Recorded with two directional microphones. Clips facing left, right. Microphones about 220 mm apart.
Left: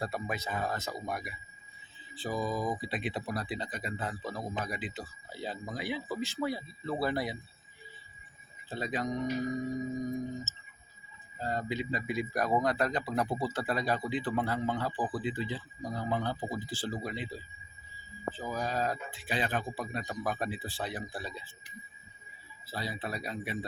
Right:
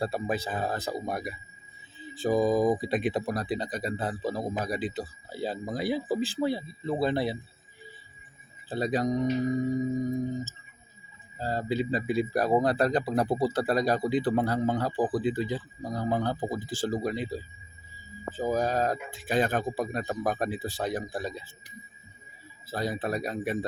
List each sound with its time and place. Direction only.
0.0 s speech: 30° right (ahead or behind)
8.7 s speech: 35° right (ahead or behind)
11.3 s speech: 35° right (ahead or behind)
22.6 s speech: 45° right (ahead or behind)